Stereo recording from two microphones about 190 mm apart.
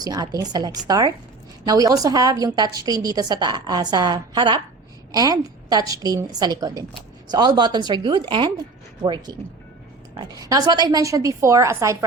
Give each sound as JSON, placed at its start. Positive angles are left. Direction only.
{"t": 0.0, "sound": "a woman's voice", "side_deg": -20}